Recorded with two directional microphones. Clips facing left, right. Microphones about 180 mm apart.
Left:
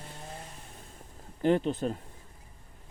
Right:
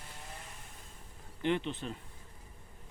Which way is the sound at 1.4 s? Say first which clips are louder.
Left 7 dB; 40° left (ahead or behind).